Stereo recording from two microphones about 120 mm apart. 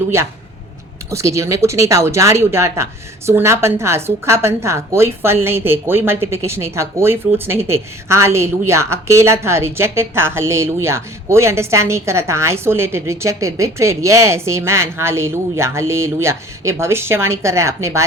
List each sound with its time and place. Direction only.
0.1 s a woman's voice: 20° right (ahead or behind)